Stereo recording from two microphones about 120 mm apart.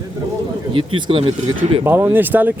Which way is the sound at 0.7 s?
45° right (ahead or behind).